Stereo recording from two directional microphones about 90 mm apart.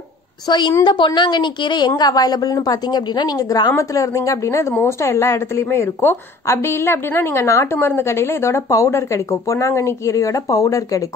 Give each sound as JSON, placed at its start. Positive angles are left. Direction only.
{"t": 0.5, "sound": "a woman's voice", "side_deg": 55}